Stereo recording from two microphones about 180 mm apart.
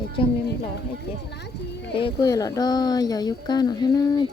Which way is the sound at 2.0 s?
25° left (ahead or behind).